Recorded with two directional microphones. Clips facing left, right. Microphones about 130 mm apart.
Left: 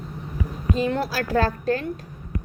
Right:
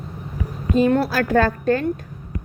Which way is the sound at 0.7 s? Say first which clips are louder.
Right 7 dB; 55° right (ahead or behind).